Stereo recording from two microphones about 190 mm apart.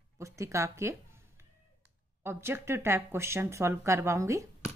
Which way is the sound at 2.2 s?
10° right (ahead or behind).